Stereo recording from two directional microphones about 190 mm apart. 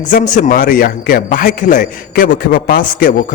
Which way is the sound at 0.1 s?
40° left (ahead or behind).